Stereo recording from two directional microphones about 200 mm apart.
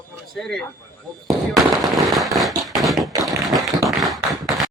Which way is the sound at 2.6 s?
Centre (ahead or behind).